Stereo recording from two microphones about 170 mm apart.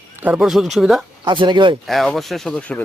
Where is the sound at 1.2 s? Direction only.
30° right (ahead or behind).